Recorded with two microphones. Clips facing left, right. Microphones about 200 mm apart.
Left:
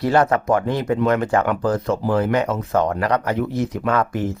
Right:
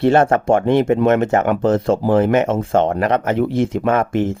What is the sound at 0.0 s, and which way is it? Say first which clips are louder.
Speech: right 4 dB; 25° right (ahead or behind).